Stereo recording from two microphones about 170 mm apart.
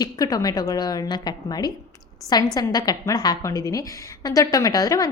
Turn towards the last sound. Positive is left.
turn(degrees=20)  # may be behind; listen again after turning